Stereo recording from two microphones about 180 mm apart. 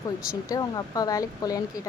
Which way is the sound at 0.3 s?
20° left (ahead or behind).